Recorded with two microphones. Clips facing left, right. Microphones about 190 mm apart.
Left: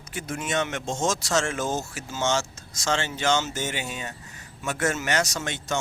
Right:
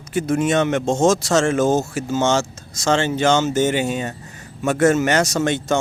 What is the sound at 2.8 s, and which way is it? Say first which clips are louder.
Speech: right 9 dB; 60° right (ahead or behind).